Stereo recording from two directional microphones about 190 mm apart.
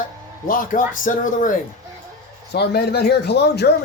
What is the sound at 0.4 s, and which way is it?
Speech, 45° left (ahead or behind).